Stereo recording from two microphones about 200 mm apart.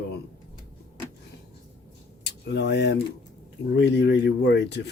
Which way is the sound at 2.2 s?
55° left (ahead or behind).